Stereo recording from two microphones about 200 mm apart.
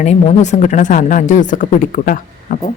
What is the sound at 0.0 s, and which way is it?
Speech, 35° left (ahead or behind).